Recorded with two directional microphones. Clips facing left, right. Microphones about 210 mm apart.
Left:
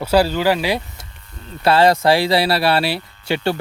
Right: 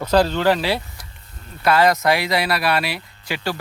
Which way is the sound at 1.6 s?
30° left (ahead or behind).